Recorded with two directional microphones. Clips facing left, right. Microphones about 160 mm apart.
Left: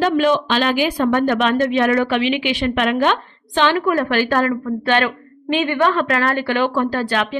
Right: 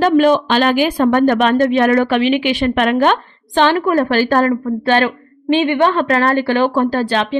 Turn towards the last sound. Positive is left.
turn(degrees=-30)  # may be behind; listen again after turning